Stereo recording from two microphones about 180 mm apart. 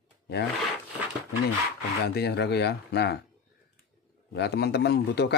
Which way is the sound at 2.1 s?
65° left (ahead or behind).